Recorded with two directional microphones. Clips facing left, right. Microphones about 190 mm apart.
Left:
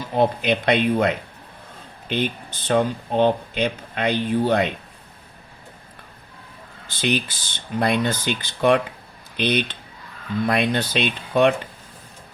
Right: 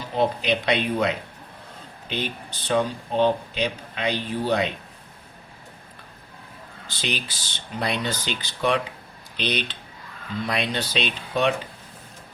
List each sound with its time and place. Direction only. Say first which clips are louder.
0.2 s speech: left 3 dB; 50° left (ahead or behind)
6.8 s speech: left 7 dB; 50° left (ahead or behind)